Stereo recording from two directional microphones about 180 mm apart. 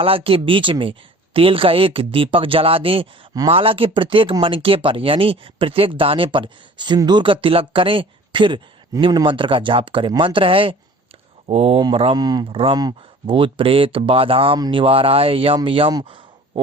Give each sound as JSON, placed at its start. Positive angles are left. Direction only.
{"t": 0.0, "sound": "speech", "side_deg": -30}